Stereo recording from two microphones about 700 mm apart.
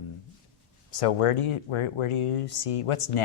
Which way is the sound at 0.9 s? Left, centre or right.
Left.